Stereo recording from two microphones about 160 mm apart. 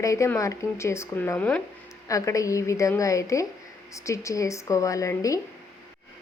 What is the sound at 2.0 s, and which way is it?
Speech, 20° left (ahead or behind).